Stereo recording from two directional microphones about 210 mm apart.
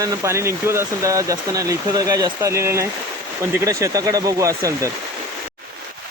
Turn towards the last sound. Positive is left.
turn(degrees=-15)  # may be behind; listen again after turning